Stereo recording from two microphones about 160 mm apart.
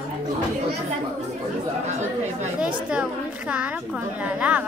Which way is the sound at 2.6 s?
5° right (ahead or behind).